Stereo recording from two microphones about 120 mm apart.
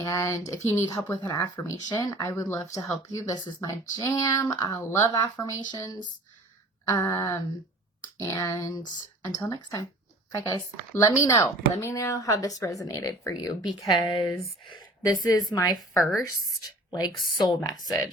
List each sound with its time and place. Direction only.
0.0 s a woman's voice: 25° left (ahead or behind)
15.0 s a woman's voice: 35° left (ahead or behind)
16.0 s a woman's voice: centre (ahead or behind)
16.2 s a woman's voice: 30° left (ahead or behind)